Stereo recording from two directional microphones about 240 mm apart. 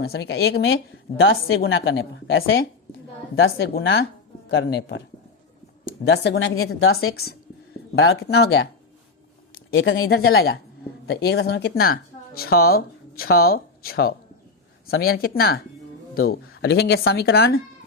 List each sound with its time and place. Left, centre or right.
0.0 s a woman's voice: left
6.1 s a woman's voice: left
9.7 s a woman's voice: left